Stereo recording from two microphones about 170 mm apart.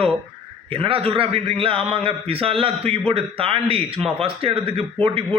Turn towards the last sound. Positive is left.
turn(degrees=-35)  # may be behind; listen again after turning